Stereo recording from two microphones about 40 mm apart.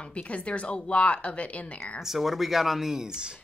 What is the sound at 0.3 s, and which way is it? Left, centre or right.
A woman's voice, left.